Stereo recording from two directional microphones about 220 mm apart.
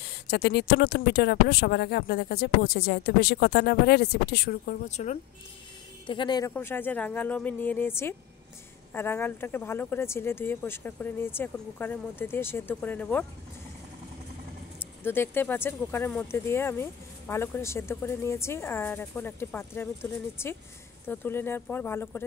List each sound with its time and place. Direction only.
0.0 s speech: 45° left (ahead or behind); by 5.2 s 30° left (ahead or behind)
6.0 s speech: 20° left (ahead or behind)
15.0 s speech: 10° left (ahead or behind)